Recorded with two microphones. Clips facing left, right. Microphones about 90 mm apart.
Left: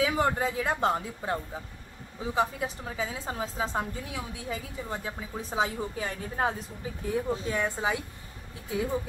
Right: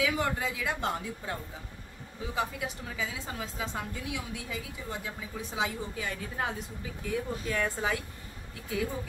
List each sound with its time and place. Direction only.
0.0 s a woman's voice: 35° left (ahead or behind); by 8.0 s 20° left (ahead or behind)